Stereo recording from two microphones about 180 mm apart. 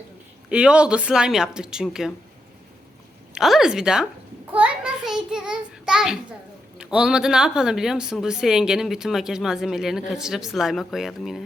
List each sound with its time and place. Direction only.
0.5 s a woman's voice: 5° right (ahead or behind)
3.3 s a woman's voice: centre (ahead or behind)
4.5 s a sound: 5° right (ahead or behind)
6.7 s a woman's voice: 5° right (ahead or behind)